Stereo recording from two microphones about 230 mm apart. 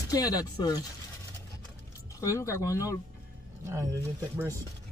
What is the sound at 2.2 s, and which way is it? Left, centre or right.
Speech, centre.